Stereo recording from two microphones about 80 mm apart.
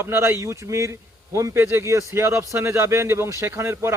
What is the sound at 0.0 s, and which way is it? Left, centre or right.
Speech, right.